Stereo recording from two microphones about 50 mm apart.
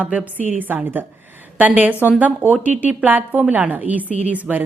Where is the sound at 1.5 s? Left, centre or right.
Right.